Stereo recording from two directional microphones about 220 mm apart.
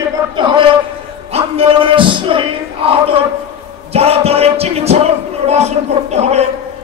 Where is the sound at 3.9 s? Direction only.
25° right (ahead or behind).